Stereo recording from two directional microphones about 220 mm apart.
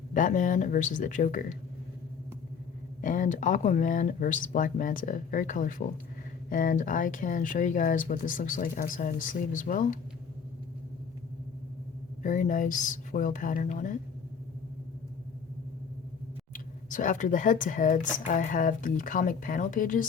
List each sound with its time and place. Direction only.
0.1 s speech: 35° left (ahead or behind)
3.0 s speech: 35° left (ahead or behind)
12.2 s speech: 35° left (ahead or behind)
16.5 s speech: 35° left (ahead or behind)